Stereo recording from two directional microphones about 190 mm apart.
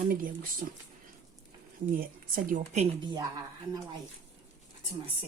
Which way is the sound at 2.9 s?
20° right (ahead or behind).